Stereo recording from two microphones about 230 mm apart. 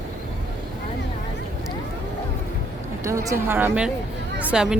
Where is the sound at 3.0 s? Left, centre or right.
Centre.